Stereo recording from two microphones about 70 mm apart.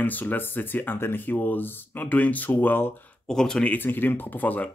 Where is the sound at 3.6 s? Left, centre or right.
Left.